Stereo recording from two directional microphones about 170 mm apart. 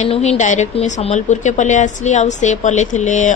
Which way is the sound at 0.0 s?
40° left (ahead or behind).